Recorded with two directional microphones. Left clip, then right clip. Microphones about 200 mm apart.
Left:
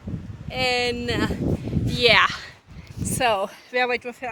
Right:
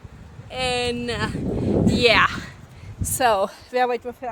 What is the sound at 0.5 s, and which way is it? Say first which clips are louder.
Speech: left 1 dB; centre (ahead or behind).